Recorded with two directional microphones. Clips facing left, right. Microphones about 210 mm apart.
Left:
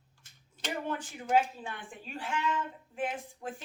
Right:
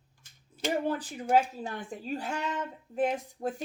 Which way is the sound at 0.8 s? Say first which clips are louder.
Right 5 dB; 35° right (ahead or behind).